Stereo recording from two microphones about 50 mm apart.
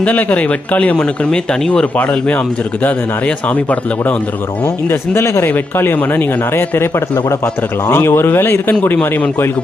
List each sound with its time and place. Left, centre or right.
0.0 s speech: left
2.0 s speech: left
4.6 s speech: left
5.7 s speech: left